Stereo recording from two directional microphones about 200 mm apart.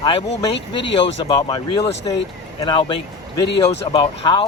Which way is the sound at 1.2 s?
20° left (ahead or behind).